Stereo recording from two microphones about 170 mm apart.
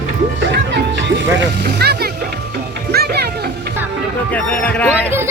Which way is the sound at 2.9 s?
70° right (ahead or behind).